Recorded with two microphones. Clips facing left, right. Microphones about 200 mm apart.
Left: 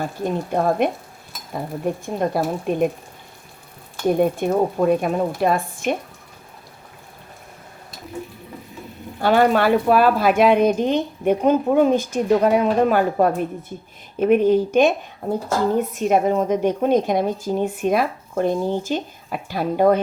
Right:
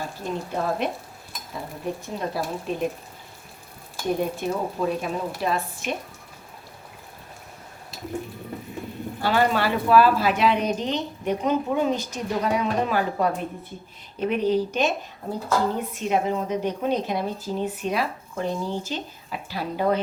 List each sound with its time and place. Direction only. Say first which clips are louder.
0.0 s speech: left 6 dB; 55° left (ahead or behind)
2.0 s speech: left 8 dB; 55° left (ahead or behind)
4.2 s speech: left 8 dB; 55° left (ahead or behind)
9.2 s speech: left 6 dB; 55° left (ahead or behind)